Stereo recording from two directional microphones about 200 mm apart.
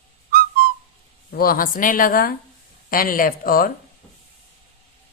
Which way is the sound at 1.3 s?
45° left (ahead or behind).